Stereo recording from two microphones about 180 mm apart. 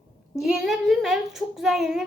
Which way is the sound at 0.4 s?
Centre (ahead or behind).